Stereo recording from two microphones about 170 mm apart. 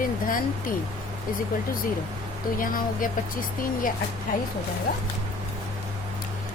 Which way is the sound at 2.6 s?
55° left (ahead or behind).